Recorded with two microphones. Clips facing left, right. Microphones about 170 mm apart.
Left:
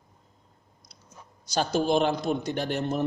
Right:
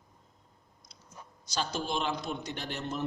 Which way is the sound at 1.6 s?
55° left (ahead or behind).